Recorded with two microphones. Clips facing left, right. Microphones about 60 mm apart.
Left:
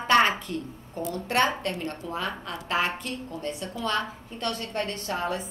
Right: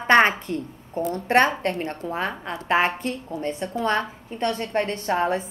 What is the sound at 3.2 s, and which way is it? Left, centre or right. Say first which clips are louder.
Speech: right 5 dB; right.